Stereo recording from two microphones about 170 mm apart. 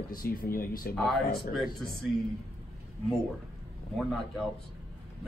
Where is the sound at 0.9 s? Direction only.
Centre (ahead or behind).